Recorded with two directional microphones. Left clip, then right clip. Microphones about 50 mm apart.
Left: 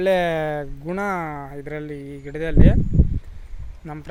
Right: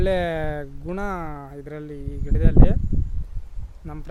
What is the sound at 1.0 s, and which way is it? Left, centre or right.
Speech, centre.